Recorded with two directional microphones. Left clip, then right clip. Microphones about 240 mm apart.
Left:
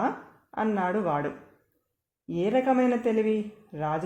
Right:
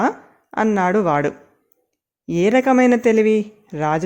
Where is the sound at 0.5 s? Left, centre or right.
Right.